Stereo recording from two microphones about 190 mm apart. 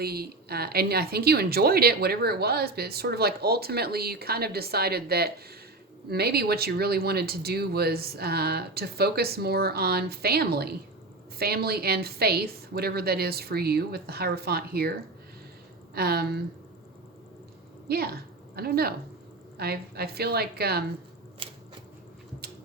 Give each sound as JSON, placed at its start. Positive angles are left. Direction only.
{"t": 0.0, "sound": "a woman's voice", "side_deg": -55}
{"t": 16.0, "sound": "a woman's voice", "side_deg": -55}
{"t": 17.8, "sound": "a woman's voice", "side_deg": -55}
{"t": 21.4, "sound": "a sound", "side_deg": -30}